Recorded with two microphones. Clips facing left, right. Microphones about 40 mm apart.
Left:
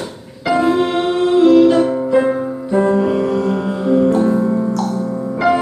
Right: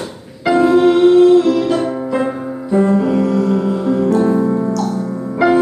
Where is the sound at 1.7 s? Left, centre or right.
Centre.